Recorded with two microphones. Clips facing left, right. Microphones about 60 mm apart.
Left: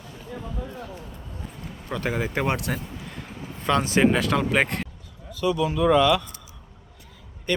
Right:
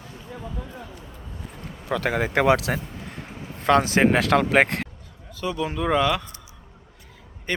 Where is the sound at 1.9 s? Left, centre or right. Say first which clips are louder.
Right 3 dB; right.